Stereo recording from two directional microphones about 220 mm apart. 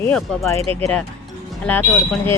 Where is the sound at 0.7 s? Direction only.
25° right (ahead or behind).